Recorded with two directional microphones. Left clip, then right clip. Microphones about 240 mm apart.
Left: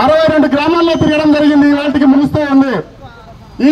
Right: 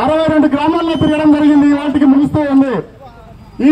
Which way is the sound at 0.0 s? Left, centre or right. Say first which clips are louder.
Left 3 dB; left.